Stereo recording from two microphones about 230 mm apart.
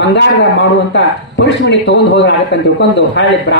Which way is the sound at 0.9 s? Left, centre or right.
Left.